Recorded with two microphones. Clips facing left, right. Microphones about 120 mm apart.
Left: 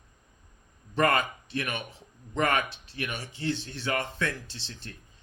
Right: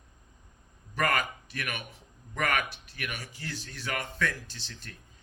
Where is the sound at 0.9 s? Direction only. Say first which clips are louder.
Left 4 dB; 25° left (ahead or behind).